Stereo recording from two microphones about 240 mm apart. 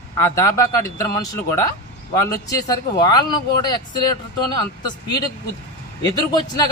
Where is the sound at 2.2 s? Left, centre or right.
Centre.